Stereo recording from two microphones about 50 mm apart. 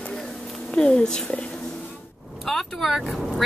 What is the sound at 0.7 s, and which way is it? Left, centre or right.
Speech, centre.